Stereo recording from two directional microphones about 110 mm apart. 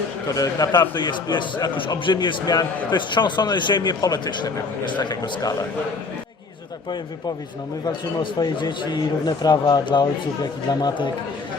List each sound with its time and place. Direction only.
0.3 s a man's voice: 35° left (ahead or behind)
8.2 s a man's voice: 45° left (ahead or behind)